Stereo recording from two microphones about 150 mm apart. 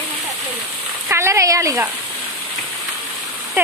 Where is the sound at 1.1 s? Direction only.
20° right (ahead or behind).